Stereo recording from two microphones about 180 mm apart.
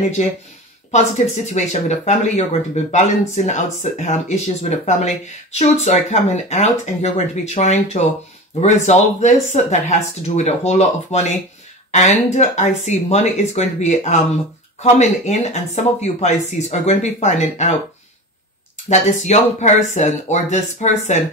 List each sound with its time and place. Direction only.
0.9 s speech: 40° left (ahead or behind)
18.9 s speech: 40° left (ahead or behind)